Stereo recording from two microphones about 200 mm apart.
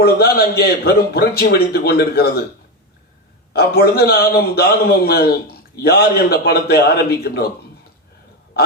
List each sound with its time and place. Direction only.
0.0 s a man's voice: 50° left (ahead or behind)
3.5 s a man's voice: 50° left (ahead or behind)
8.6 s a sound: 50° left (ahead or behind)